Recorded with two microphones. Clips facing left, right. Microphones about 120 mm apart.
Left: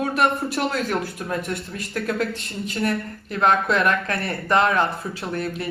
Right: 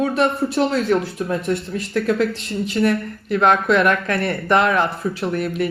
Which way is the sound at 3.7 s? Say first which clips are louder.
Right 4 dB; 35° left (ahead or behind).